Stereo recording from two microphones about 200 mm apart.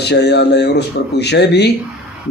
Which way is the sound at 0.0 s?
55° left (ahead or behind).